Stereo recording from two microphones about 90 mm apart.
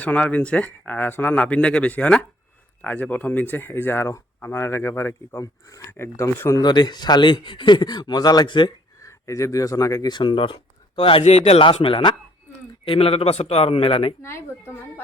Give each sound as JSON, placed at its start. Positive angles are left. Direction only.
{"t": 0.0, "sound": "speech", "side_deg": 15}
{"t": 6.6, "sound": "a man's voice", "side_deg": 55}
{"t": 9.0, "sound": "speech", "side_deg": 35}
{"t": 10.1, "sound": "a man's voice", "side_deg": 60}
{"t": 14.2, "sound": "speech", "side_deg": 30}